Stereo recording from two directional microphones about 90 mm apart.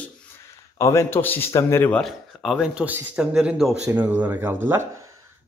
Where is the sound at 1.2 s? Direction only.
20° left (ahead or behind).